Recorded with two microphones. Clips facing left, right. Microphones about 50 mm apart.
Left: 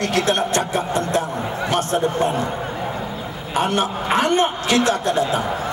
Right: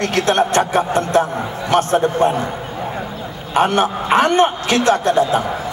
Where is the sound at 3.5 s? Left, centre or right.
Right.